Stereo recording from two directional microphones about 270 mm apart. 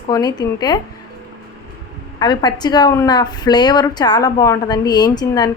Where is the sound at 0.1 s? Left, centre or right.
Centre.